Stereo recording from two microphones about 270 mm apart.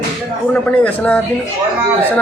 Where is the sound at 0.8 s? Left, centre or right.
Centre.